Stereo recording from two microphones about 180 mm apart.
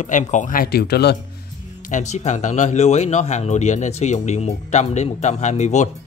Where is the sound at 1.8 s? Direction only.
45° left (ahead or behind).